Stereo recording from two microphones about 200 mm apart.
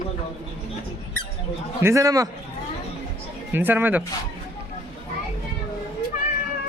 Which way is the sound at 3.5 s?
10° right (ahead or behind).